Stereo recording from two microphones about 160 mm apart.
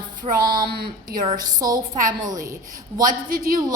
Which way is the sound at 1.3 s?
25° right (ahead or behind).